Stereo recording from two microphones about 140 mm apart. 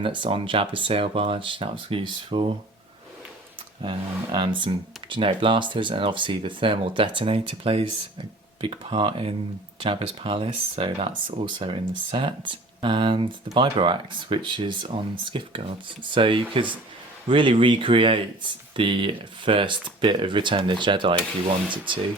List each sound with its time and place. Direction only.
0.0 s speech: 35° right (ahead or behind)
3.8 s speech: 35° right (ahead or behind)